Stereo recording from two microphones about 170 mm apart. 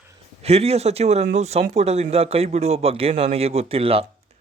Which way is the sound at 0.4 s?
35° right (ahead or behind).